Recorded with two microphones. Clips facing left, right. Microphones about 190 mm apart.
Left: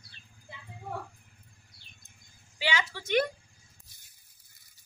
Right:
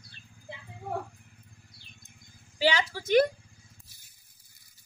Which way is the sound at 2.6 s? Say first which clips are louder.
Right 6 dB; 35° right (ahead or behind).